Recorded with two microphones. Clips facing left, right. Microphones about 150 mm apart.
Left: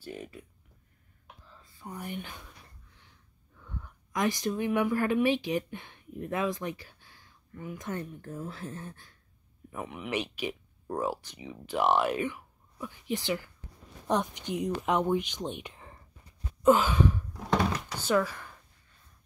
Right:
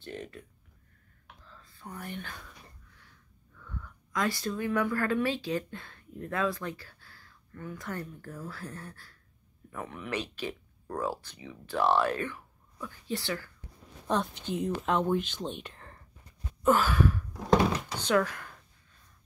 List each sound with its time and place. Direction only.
0.0 s speech: 10° left (ahead or behind)
1.2 s whispering: 15° left (ahead or behind)
2.0 s speech: 15° left (ahead or behind)
3.5 s speech: 25° left (ahead or behind)
16.6 s sigh: 20° left (ahead or behind)
17.9 s speech: 10° left (ahead or behind)